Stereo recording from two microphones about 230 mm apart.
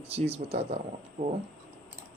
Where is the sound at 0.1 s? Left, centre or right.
Right.